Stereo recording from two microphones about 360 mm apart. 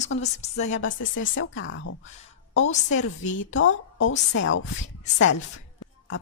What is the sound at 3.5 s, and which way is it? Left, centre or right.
A woman's voice, left.